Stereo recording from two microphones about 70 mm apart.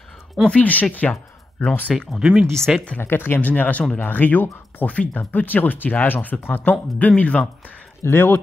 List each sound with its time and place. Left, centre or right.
0.5 s speech: left
2.1 s speech: centre
3.0 s speech: left
8.0 s speech: left